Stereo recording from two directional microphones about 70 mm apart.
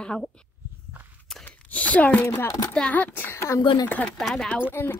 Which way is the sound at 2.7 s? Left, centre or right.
Centre.